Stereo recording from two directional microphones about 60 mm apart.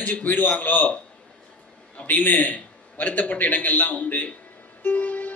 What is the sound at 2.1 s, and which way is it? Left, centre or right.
A man's voice, left.